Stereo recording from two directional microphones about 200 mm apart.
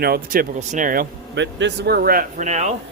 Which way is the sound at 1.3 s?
60° right (ahead or behind).